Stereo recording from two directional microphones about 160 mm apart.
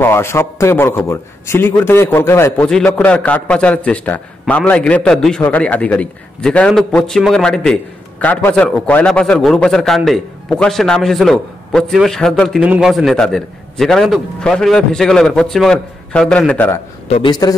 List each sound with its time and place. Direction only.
0.0 s a man's voice: 15° left (ahead or behind)
2.7 s a man's voice: 5° left (ahead or behind)
17.1 s a man's voice: 30° left (ahead or behind)